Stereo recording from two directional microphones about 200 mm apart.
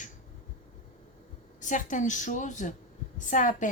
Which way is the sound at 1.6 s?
40° left (ahead or behind).